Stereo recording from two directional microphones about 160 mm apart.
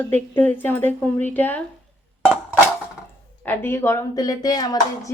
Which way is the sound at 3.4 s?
15° left (ahead or behind).